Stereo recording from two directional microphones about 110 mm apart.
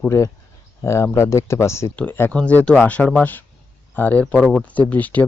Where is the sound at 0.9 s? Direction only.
25° left (ahead or behind).